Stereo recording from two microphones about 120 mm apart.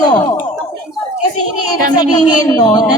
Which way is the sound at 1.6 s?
30° left (ahead or behind).